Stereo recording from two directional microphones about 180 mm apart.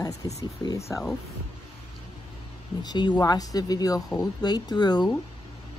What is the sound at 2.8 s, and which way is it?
Speech, 25° left (ahead or behind).